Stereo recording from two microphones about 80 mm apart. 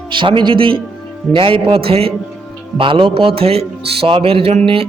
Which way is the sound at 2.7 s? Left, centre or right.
Right.